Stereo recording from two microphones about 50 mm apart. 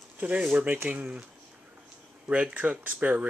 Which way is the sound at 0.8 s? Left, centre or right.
Right.